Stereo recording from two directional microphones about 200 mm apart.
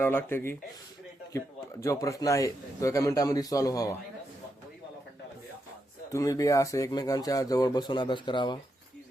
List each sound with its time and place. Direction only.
0.0 s speech: 10° left (ahead or behind)
1.8 s speech: 15° left (ahead or behind)
6.1 s speech: 15° left (ahead or behind)